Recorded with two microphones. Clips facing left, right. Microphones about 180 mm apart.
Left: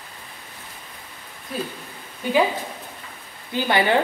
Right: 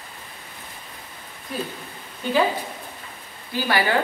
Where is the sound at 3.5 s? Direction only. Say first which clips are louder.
Left 2 dB; 20° left (ahead or behind).